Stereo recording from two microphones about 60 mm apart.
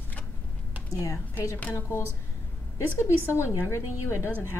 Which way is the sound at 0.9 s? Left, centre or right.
Left.